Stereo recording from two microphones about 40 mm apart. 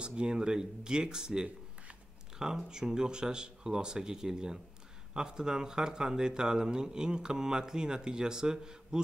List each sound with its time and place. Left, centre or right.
0.0 s speech: right